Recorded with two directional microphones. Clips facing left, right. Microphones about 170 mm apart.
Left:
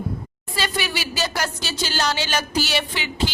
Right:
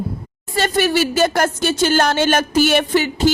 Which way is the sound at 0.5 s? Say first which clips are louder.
Right 10 dB; 50° right (ahead or behind).